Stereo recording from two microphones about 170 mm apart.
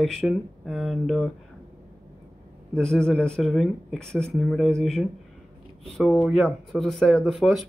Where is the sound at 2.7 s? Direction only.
5° left (ahead or behind).